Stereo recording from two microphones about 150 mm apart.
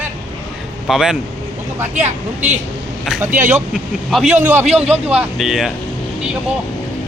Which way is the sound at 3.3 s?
55° right (ahead or behind).